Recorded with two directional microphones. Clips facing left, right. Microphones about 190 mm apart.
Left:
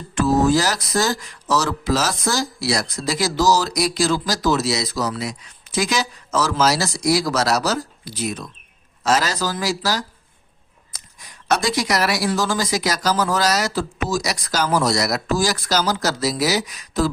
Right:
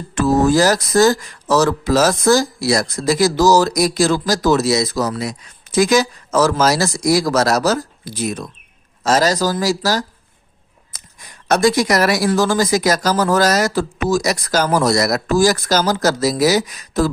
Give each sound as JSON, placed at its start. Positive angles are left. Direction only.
{"t": 0.1, "sound": "speech", "side_deg": -50}
{"t": 11.4, "sound": "speech", "side_deg": -50}